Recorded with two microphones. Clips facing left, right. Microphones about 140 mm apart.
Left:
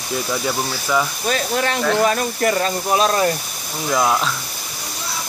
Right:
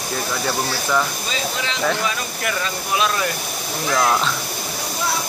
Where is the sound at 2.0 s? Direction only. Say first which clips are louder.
Left 7 dB; 40° left (ahead or behind).